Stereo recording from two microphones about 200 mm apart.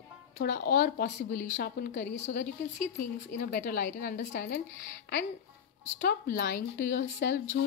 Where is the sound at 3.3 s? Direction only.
50° left (ahead or behind).